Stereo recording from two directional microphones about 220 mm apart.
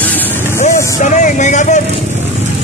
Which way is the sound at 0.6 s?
35° left (ahead or behind).